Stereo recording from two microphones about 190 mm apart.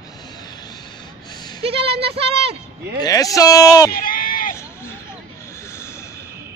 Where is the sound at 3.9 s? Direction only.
50° left (ahead or behind).